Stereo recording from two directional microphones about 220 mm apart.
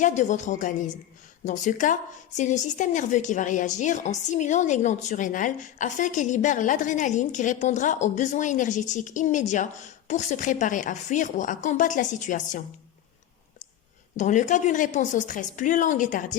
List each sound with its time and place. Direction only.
0.0 s a woman's voice: 35° left (ahead or behind)
14.2 s a woman's voice: 35° left (ahead or behind)